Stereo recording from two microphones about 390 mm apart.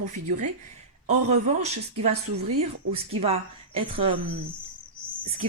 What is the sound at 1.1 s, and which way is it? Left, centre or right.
A woman's voice, centre.